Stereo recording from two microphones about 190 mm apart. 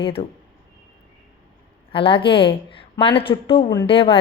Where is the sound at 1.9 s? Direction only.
25° left (ahead or behind).